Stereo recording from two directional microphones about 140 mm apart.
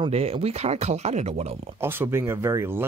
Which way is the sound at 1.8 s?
15° right (ahead or behind).